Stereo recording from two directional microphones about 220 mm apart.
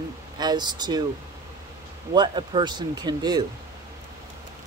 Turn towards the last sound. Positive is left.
turn(degrees=-20)  # may be behind; listen again after turning